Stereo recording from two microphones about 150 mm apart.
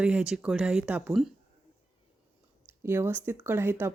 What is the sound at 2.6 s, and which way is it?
Speech, 15° right (ahead or behind).